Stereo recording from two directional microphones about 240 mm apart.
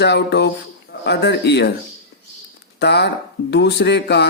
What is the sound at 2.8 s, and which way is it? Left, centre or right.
Speech, left.